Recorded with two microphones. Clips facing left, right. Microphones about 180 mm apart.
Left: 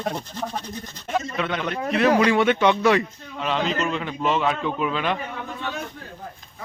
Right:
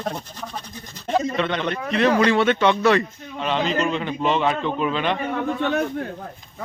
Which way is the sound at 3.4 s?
Centre (ahead or behind).